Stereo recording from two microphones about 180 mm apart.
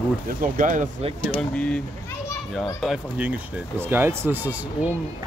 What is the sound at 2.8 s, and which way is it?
Speech, 5° right (ahead or behind).